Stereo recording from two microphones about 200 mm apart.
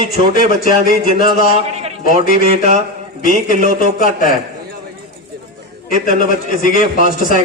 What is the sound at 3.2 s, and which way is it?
Speech, 45° left (ahead or behind).